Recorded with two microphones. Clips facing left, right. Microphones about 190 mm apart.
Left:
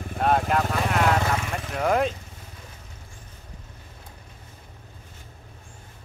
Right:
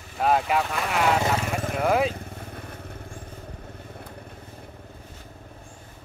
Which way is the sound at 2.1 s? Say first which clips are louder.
Right 8 dB; 60° right (ahead or behind).